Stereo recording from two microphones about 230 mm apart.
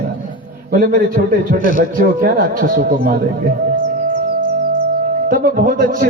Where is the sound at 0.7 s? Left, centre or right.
Right.